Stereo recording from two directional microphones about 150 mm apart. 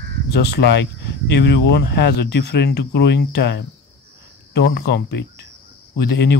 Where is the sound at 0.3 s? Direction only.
90° left.